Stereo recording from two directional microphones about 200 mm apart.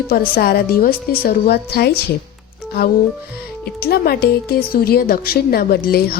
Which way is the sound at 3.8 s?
50° left (ahead or behind).